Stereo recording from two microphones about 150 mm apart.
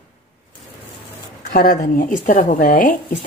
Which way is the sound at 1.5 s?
55° left (ahead or behind).